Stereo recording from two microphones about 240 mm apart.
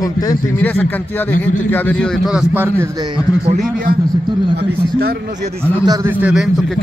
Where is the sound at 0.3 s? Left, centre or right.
Centre.